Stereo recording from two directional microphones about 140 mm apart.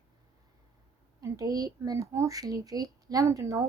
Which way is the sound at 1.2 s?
25° right (ahead or behind).